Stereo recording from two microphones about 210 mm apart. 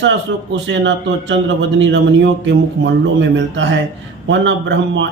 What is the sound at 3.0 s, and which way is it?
Speech, 60° right (ahead or behind).